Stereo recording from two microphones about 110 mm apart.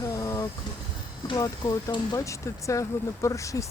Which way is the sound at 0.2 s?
30° left (ahead or behind).